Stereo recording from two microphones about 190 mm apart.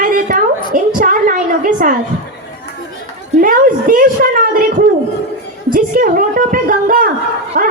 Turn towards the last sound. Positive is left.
turn(degrees=-45)  # may be behind; listen again after turning